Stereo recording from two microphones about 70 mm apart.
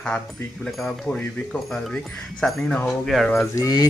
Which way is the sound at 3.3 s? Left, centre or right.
Left.